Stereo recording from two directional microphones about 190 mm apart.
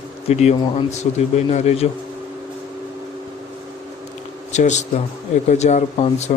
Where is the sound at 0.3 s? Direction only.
35° left (ahead or behind).